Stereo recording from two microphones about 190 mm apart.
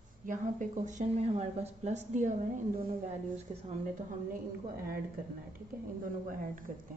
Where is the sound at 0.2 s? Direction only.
45° right (ahead or behind).